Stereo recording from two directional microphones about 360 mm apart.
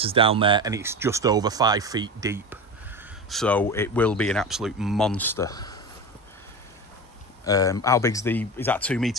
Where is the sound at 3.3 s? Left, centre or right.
Centre.